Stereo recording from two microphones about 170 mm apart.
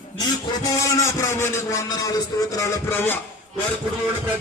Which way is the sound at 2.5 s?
15° left (ahead or behind).